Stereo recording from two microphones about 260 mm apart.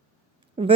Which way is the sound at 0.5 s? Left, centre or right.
Right.